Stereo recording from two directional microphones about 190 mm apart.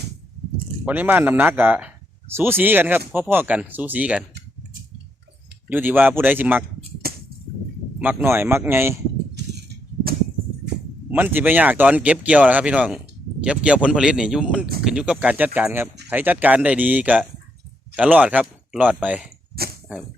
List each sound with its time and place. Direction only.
0.9 s speech: 10° right (ahead or behind)
5.6 s speech: 10° right (ahead or behind)
7.1 s a sound: 55° right (ahead or behind)
7.9 s speech: 10° right (ahead or behind)
9.3 s a sound: 55° right (ahead or behind)
11.1 s speech: 10° right (ahead or behind)